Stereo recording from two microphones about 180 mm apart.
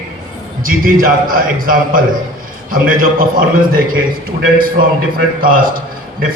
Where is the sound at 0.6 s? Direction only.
50° right (ahead or behind).